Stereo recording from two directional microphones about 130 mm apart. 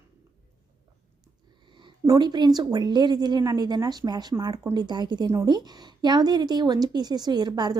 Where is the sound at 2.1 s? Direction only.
35° right (ahead or behind).